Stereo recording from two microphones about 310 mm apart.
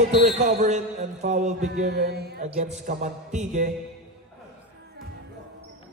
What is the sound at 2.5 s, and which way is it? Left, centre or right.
A man's voice, centre.